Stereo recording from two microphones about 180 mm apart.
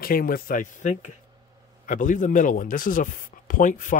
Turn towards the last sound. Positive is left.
turn(degrees=45)  # may be behind; listen again after turning